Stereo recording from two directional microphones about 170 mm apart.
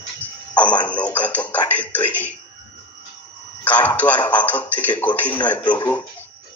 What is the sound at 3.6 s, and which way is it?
A man's voice, 10° left (ahead or behind).